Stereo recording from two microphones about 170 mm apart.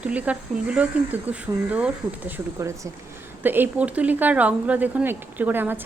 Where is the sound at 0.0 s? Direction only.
10° right (ahead or behind).